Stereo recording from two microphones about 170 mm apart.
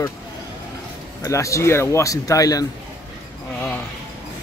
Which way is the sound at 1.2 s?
20° left (ahead or behind).